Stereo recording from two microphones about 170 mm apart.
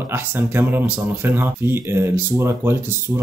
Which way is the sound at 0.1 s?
15° right (ahead or behind).